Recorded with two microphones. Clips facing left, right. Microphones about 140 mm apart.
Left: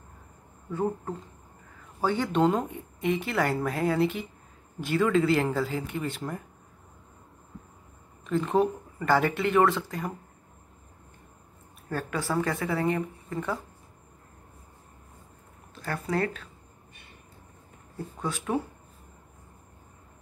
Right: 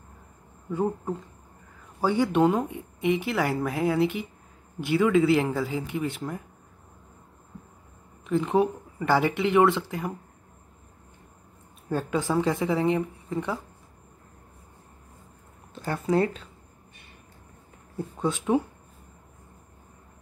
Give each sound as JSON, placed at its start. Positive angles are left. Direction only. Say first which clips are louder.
{"t": 0.7, "sound": "a woman's voice", "louder": "right 2 dB", "side_deg": -15}
{"t": 8.3, "sound": "speech", "louder": "right 1 dB", "side_deg": -15}
{"t": 11.9, "sound": "speech", "louder": "right 4 dB", "side_deg": -20}
{"t": 15.8, "sound": "speech", "louder": "right 5 dB", "side_deg": -20}
{"t": 17.9, "sound": "speech", "louder": "right 5 dB", "side_deg": -20}